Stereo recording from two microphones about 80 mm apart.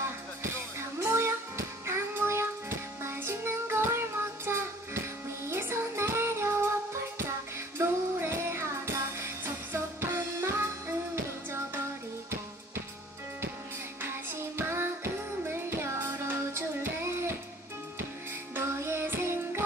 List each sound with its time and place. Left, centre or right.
0.0 s music: right
14.3 s music: right
18.5 s music: right